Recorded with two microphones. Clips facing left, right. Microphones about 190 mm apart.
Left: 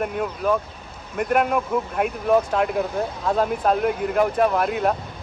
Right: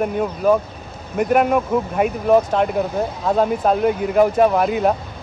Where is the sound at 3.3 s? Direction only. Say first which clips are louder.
Right 3 dB; centre (ahead or behind).